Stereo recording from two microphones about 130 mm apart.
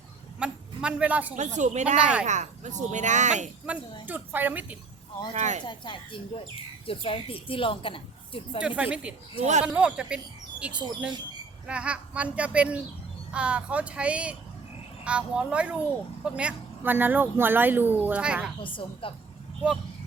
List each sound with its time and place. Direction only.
0.3 s a man's voice: 5° right (ahead or behind)
1.5 s speech: 70° right (ahead or behind)
2.0 s speech: 10° right (ahead or behind)
2.2 s speech: 65° right (ahead or behind)
4.0 s speech: 15° right (ahead or behind)
5.3 s speech: 65° right (ahead or behind)
5.6 s a woman's voice: 40° left (ahead or behind)
8.6 s speech: 10° right (ahead or behind)
9.4 s speech: 65° right (ahead or behind)
9.6 s speech: 10° right (ahead or behind)
18.6 s speech: 40° left (ahead or behind)